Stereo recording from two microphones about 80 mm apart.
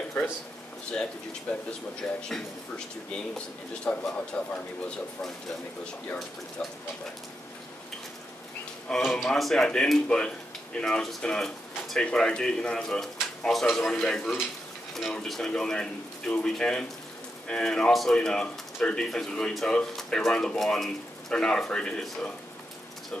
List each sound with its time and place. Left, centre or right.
1.5 s speech: centre
2.0 s speech: centre
8.9 s speech: centre